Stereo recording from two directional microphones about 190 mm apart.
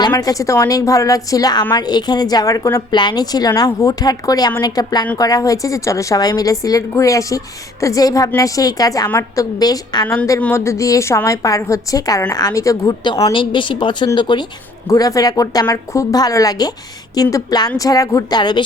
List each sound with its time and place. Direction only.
0.1 s a woman's voice: 15° left (ahead or behind)